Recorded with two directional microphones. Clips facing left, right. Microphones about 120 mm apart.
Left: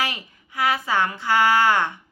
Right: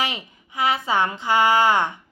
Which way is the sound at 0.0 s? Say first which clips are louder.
Right 1 dB; 20° right (ahead or behind).